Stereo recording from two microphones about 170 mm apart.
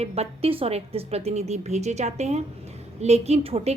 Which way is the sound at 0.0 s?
35° right (ahead or behind).